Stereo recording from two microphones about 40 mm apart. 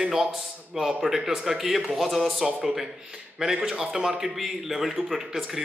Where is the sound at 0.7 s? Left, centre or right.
Centre.